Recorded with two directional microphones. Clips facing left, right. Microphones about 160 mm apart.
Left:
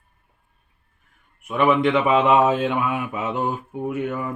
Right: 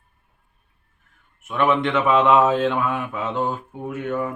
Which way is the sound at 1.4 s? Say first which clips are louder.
Left 2 dB; 5° left (ahead or behind).